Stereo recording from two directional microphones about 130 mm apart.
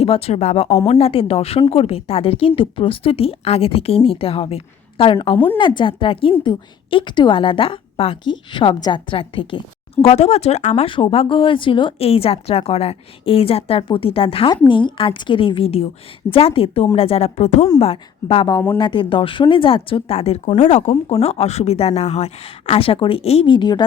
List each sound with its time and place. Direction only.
0.0 s a woman's voice: 50° left (ahead or behind)
10.8 s a woman's voice: 45° left (ahead or behind); by 17.7 s 60° left (ahead or behind)
17.7 s a woman's voice: 50° left (ahead or behind)